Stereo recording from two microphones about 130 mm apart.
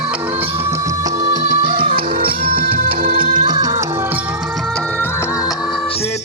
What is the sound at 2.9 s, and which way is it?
Music, 35° right (ahead or behind).